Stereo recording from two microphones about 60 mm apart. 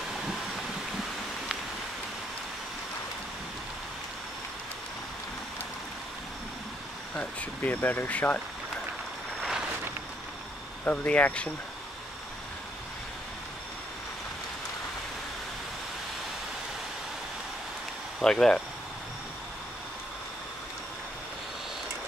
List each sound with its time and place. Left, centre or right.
7.2 s speech: left
10.8 s speech: left
18.2 s speech: centre